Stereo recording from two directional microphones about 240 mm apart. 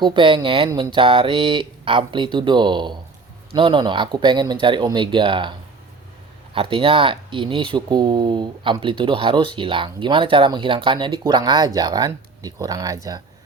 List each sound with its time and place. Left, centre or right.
0.0 s speech: right